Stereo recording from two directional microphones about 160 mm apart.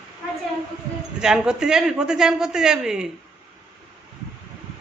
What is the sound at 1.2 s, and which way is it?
A man's voice, 5° right (ahead or behind).